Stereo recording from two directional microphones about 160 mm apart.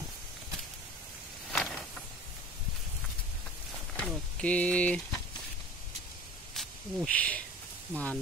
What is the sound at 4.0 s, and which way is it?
Speech, 10° left (ahead or behind).